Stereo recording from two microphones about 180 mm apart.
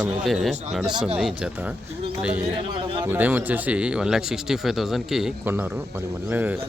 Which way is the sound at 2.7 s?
25° right (ahead or behind).